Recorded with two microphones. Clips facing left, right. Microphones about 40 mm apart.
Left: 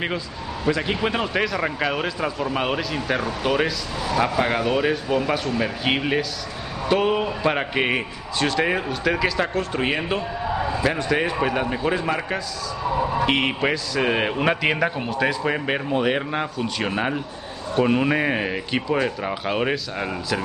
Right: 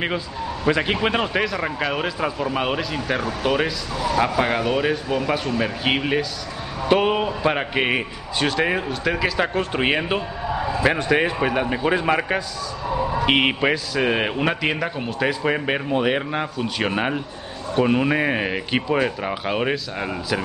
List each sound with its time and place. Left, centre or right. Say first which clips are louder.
0.7 s a man's voice: right 2 dB; right
1.4 s speech: even; centre
6.9 s a man's voice: right 2 dB; centre
9.4 s a man's voice: right 2 dB; centre
13.6 s speech: right 1 dB; centre
18.5 s a man's voice: right 1 dB; centre